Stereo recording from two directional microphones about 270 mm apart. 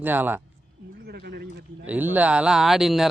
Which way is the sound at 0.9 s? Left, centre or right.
Right.